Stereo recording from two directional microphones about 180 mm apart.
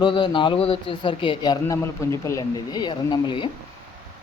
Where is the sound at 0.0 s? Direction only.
25° left (ahead or behind).